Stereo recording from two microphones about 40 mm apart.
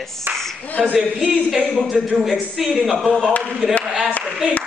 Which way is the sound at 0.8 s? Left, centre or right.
Centre.